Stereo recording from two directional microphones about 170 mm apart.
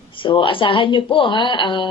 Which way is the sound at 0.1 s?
30° left (ahead or behind).